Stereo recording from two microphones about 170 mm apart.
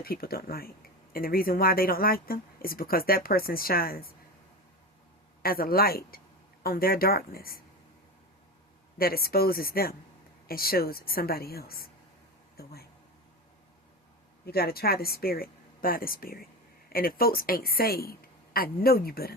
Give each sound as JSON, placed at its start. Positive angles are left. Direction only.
{"t": 0.0, "sound": "speech", "side_deg": 60}
{"t": 5.4, "sound": "speech", "side_deg": 60}
{"t": 9.0, "sound": "speech", "side_deg": 60}
{"t": 12.6, "sound": "a sound", "side_deg": 65}
{"t": 14.4, "sound": "speech", "side_deg": 65}